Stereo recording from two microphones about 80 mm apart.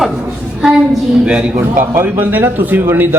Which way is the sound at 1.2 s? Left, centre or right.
Centre.